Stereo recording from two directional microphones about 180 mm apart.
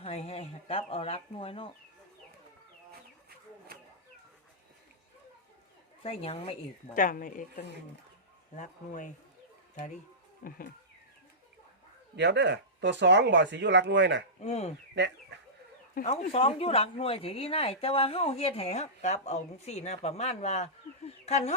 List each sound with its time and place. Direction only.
0.0 s speech: 35° left (ahead or behind)
6.0 s speech: 35° left (ahead or behind)
6.9 s speech: 50° left (ahead or behind)
10.4 s speech: 50° left (ahead or behind)
12.1 s speech: 70° right (ahead or behind)
14.4 s speech: 35° left (ahead or behind)
15.0 s speech: 75° right (ahead or behind)
16.0 s speech: 35° left (ahead or behind)